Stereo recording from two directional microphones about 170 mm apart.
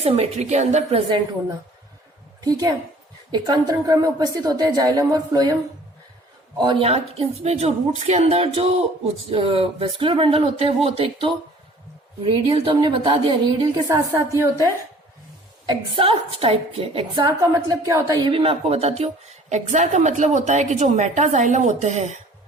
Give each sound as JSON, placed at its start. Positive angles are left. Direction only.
{"t": 0.0, "sound": "a woman's voice", "side_deg": -40}
{"t": 2.4, "sound": "a woman's voice", "side_deg": -20}
{"t": 6.6, "sound": "a woman's voice", "side_deg": -30}
{"t": 13.8, "sound": "a woman's voice", "side_deg": -15}
{"t": 15.6, "sound": "a woman's voice", "side_deg": -30}
{"t": 17.2, "sound": "a woman's voice", "side_deg": -20}
{"t": 18.3, "sound": "speech", "side_deg": -35}